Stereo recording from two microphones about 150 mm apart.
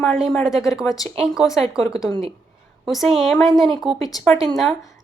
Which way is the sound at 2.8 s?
Centre (ahead or behind).